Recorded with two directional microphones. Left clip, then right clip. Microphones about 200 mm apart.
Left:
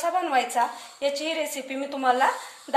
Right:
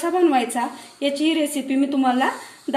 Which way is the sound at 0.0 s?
35° left (ahead or behind).